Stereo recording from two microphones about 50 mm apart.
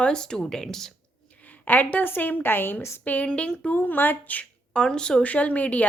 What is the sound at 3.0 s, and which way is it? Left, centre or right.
Speech, left.